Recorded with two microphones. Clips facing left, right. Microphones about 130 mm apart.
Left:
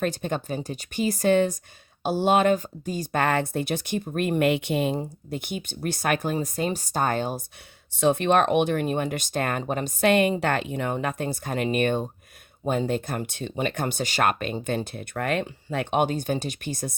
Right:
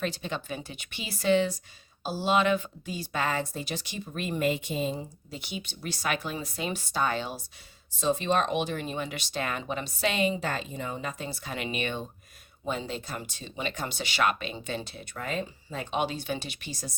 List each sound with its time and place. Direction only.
0.0 s speech: 50° left (ahead or behind)
7.9 s speech: 65° left (ahead or behind)